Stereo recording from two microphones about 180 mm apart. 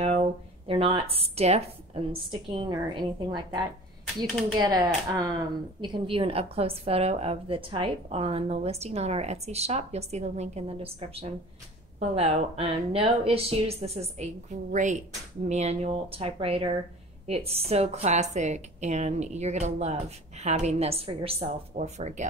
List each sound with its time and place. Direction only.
0.0 s speech: 35° right (ahead or behind)